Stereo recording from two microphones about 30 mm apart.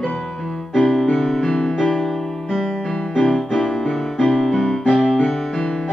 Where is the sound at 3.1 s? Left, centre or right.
Centre.